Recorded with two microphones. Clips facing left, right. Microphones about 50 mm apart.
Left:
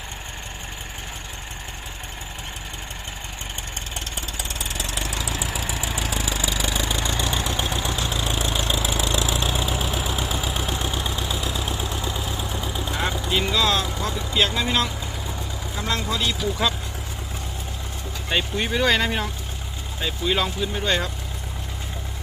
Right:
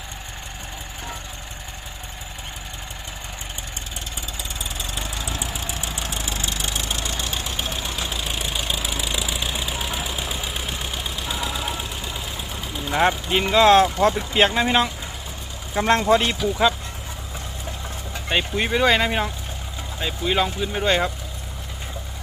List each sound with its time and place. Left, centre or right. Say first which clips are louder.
4.4 s vehicle: left 2 dB; left
12.9 s vehicle: right 6 dB; right
13.5 s speech: right 12 dB; right
15.7 s speech: right 10 dB; right
16.4 s speech: right 4 dB; centre
18.3 s speech: right 2 dB; centre